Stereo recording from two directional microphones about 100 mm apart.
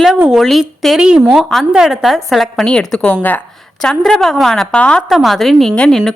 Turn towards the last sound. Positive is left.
turn(degrees=5)  # may be behind; listen again after turning